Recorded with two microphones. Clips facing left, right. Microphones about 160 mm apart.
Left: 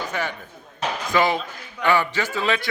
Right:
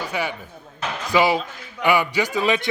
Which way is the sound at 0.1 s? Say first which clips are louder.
Right 2 dB; 10° right (ahead or behind).